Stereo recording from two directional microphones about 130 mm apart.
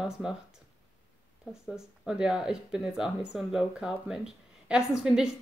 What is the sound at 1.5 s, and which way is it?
Speech, 5° right (ahead or behind).